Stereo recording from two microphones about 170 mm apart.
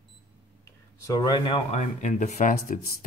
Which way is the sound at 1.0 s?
25° left (ahead or behind).